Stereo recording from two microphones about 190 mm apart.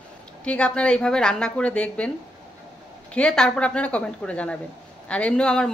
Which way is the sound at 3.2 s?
5° left (ahead or behind).